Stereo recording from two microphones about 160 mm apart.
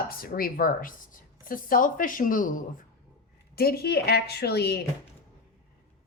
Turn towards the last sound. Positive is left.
turn(degrees=90)